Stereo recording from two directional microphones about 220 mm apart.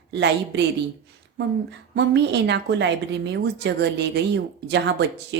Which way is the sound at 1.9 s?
50° right (ahead or behind).